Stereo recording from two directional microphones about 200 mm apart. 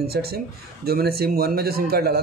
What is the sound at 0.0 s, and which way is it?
A man's voice, 50° right (ahead or behind).